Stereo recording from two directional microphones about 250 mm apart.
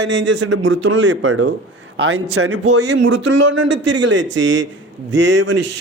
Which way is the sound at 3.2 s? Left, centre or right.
Right.